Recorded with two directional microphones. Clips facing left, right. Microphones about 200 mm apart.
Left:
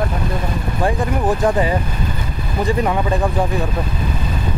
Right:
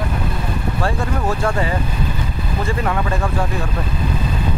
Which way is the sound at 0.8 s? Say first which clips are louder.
Left 4 dB; 15° left (ahead or behind).